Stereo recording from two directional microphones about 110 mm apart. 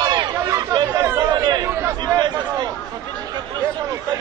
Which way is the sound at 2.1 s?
40° right (ahead or behind).